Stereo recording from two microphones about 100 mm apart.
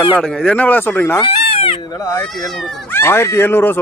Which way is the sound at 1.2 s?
65° left (ahead or behind).